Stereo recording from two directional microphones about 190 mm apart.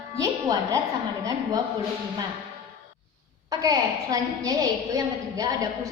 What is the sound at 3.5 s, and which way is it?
A woman's voice, 15° right (ahead or behind).